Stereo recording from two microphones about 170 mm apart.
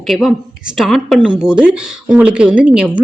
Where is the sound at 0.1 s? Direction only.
Centre (ahead or behind).